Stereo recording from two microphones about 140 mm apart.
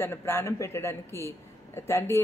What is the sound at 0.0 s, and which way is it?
Speech, 15° left (ahead or behind).